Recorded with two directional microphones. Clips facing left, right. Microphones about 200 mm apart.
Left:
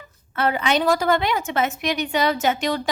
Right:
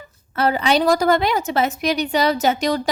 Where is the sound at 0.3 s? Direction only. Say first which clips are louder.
Right 3 dB; 35° right (ahead or behind).